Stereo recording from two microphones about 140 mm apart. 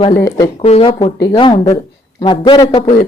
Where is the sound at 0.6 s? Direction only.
45° left (ahead or behind); by 2.7 s 30° left (ahead or behind).